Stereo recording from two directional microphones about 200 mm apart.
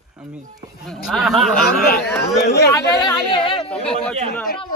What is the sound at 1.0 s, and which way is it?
Speech, centre (ahead or behind).